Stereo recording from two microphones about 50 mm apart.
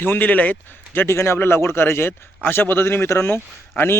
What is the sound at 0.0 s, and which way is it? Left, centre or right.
Speech, left.